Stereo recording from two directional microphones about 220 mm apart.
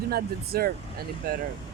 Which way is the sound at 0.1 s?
45° right (ahead or behind).